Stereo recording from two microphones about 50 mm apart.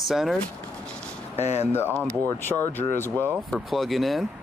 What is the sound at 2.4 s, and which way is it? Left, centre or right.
Speech, left.